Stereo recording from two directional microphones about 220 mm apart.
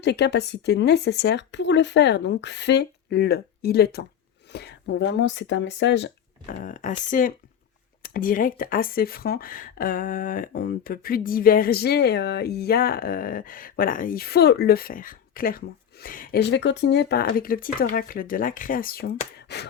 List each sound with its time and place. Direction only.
0.0 s speech: 50° left (ahead or behind)
6.5 s speech: 35° left (ahead or behind)